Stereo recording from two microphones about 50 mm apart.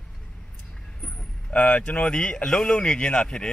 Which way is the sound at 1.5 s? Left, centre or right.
Left.